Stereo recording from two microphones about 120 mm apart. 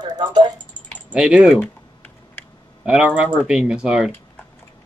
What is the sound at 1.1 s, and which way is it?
Speech, 10° right (ahead or behind).